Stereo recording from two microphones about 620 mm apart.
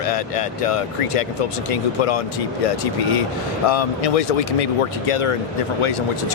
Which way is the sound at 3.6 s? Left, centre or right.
Left.